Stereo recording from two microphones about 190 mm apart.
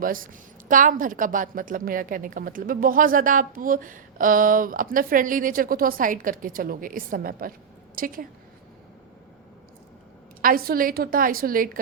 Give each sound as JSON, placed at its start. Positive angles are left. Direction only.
{"t": 0.0, "sound": "a woman's voice", "side_deg": -45}
{"t": 10.4, "sound": "a woman's voice", "side_deg": -50}